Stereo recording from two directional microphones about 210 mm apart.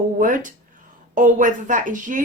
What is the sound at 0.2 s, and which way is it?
A woman's voice, 40° right (ahead or behind).